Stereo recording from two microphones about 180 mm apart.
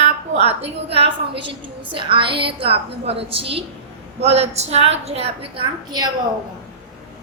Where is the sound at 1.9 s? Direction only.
30° right (ahead or behind).